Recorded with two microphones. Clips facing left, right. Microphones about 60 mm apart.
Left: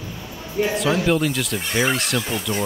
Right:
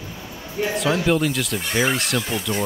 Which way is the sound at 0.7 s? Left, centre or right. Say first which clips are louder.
Right 1 dB; centre.